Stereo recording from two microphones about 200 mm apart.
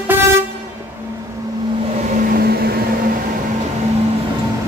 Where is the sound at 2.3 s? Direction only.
50° right (ahead or behind).